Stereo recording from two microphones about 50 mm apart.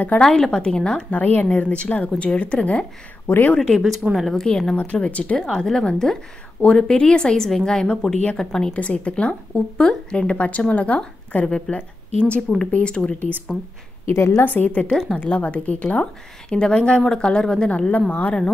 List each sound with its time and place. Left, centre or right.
0.2 s speech: centre
1.1 s a woman's voice: left
3.3 s speech: left
3.5 s speech: centre
4.1 s speech: centre
4.4 s speech: centre
4.9 s speech: left
6.6 s a woman's voice: left
7.3 s speech: centre
8.7 s a woman's voice: left
14.1 s a woman's voice: left
14.4 s a woman's voice: left
14.9 s speech: centre
15.1 s a woman's voice: left